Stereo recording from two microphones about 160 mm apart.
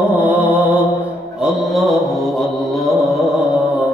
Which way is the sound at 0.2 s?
10° right (ahead or behind).